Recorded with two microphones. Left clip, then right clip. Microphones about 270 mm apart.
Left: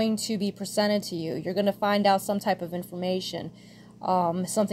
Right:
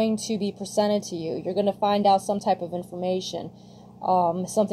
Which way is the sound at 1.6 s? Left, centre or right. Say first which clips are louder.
Right 2 dB; left.